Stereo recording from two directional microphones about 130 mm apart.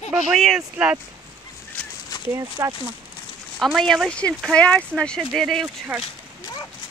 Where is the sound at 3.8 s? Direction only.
5° left (ahead or behind).